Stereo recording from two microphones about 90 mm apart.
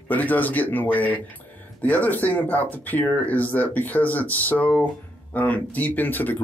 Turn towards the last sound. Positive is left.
turn(degrees=20)  # may be behind; listen again after turning